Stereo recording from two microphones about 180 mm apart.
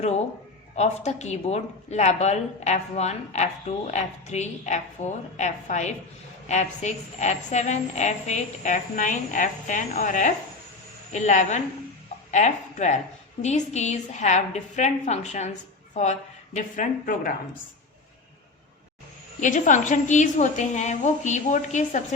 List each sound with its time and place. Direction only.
0.8 s a woman's voice: 40° left (ahead or behind)
16.6 s a woman's voice: 50° left (ahead or behind)
19.4 s a woman's voice: 45° left (ahead or behind)